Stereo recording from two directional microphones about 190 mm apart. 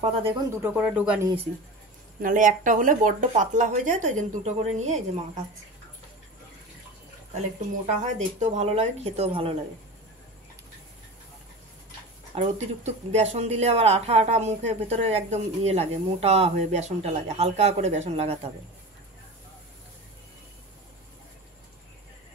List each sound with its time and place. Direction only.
0.0 s speech: 25° right (ahead or behind)
0.5 s speech: 10° right (ahead or behind)
2.2 s speech: 45° right (ahead or behind)
7.3 s speech: 40° right (ahead or behind)
12.4 s speech: 35° right (ahead or behind)